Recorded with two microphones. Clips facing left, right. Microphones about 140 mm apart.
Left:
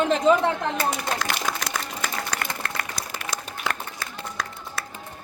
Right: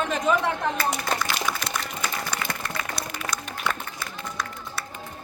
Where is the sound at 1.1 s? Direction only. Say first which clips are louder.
Even; 85° left.